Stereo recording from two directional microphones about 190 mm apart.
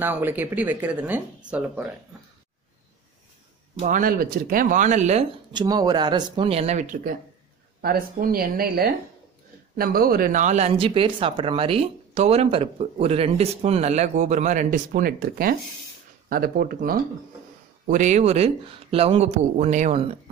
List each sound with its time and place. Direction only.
0.0 s speech: 10° right (ahead or behind)
3.8 s speech: 45° right (ahead or behind)
5.5 s speech: 20° right (ahead or behind); by 17.0 s 50° right (ahead or behind)
17.8 s speech: 40° right (ahead or behind)